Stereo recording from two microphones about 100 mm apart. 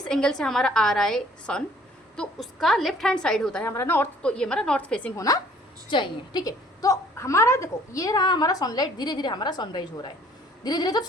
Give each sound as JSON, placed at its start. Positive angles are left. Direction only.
{"t": 0.0, "sound": "a woman's voice", "side_deg": 5}
{"t": 3.6, "sound": "a woman's voice", "side_deg": 25}
{"t": 4.2, "sound": "a woman's voice", "side_deg": 10}
{"t": 5.1, "sound": "a woman's voice", "side_deg": 35}
{"t": 5.9, "sound": "a woman's voice", "side_deg": 50}
{"t": 6.4, "sound": "a woman's voice", "side_deg": 35}